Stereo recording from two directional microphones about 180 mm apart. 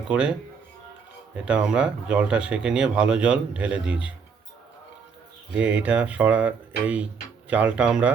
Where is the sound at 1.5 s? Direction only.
5° right (ahead or behind).